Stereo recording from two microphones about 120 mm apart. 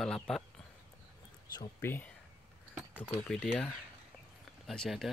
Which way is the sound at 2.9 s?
5° left (ahead or behind).